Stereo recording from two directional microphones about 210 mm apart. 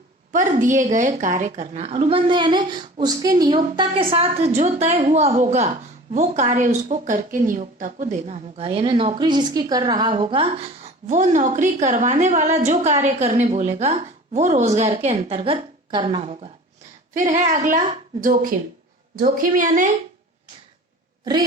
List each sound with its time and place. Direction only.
0.3 s a woman's voice: 35° right (ahead or behind)